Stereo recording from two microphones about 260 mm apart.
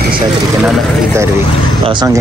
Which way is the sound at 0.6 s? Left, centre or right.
Centre.